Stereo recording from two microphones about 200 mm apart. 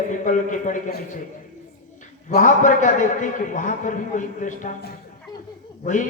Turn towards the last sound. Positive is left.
turn(degrees=40)  # may be behind; listen again after turning